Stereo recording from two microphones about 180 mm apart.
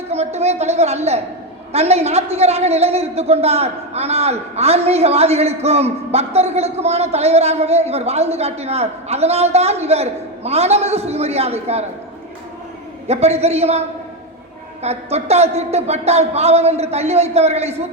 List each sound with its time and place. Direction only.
0.1 s a man's voice: 35° right (ahead or behind)
13.1 s a man's voice: 35° right (ahead or behind)